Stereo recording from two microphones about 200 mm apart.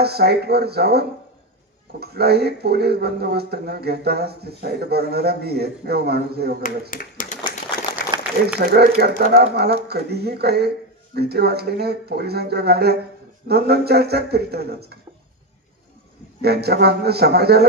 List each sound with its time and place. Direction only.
0.0 s speech: 55° right (ahead or behind)
6.9 s speech: 40° left (ahead or behind)
8.1 s a sound: 20° right (ahead or behind)
8.5 s speech: 50° right (ahead or behind)
16.3 s speech: 55° right (ahead or behind)